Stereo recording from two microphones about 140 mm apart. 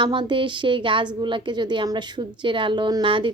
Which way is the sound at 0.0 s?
35° right (ahead or behind).